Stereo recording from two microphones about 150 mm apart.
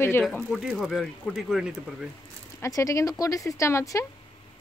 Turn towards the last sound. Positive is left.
turn(degrees=20)  # may be behind; listen again after turning